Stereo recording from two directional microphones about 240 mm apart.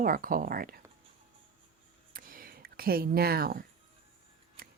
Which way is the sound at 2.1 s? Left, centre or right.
Right.